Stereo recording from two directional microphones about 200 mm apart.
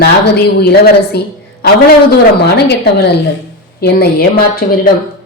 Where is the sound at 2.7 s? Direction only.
55° left (ahead or behind).